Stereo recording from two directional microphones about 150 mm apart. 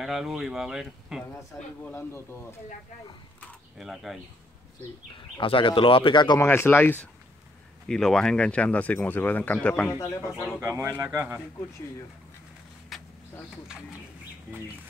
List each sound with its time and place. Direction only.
0.0 s speech: 5° right (ahead or behind)
1.9 s speech: 15° left (ahead or behind)
3.7 s speech: centre (ahead or behind)
5.1 s speech: 35° left (ahead or behind)
6.4 s speech: 15° left (ahead or behind)
9.9 s speech: 20° left (ahead or behind)
10.6 s speech: 15° right (ahead or behind)
12.9 s vehicle: centre (ahead or behind)